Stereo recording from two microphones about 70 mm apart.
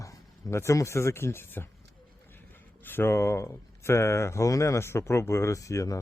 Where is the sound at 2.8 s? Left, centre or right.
Left.